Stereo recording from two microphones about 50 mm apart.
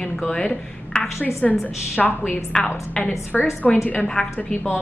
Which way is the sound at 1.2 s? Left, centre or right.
Left.